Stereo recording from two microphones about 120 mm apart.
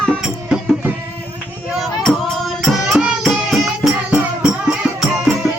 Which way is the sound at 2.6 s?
Centre (ahead or behind).